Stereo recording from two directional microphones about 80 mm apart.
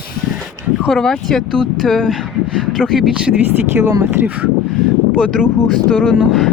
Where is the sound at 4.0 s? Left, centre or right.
Right.